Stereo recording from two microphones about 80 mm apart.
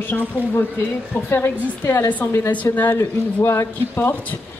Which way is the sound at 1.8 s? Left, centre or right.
Left.